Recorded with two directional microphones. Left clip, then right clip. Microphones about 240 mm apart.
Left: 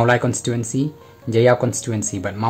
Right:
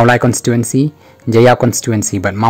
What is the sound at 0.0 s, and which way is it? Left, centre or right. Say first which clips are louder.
Speech: right 7 dB; right.